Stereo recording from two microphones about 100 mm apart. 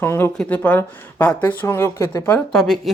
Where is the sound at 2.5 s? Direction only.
5° left (ahead or behind).